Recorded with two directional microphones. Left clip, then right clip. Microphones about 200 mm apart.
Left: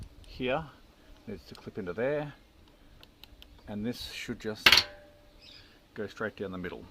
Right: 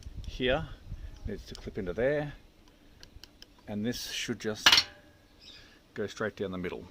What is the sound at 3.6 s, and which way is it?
Speech, 35° right (ahead or behind).